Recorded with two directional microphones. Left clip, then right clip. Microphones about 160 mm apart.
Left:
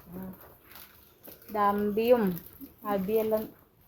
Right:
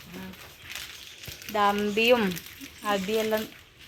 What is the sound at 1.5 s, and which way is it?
Speech, 20° right (ahead or behind).